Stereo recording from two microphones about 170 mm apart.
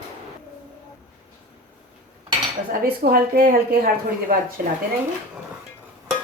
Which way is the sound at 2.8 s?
60° right (ahead or behind).